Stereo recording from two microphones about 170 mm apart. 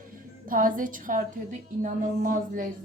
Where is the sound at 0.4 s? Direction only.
55° right (ahead or behind).